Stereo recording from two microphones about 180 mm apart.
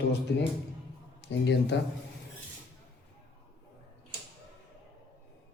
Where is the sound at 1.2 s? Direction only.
75° left (ahead or behind).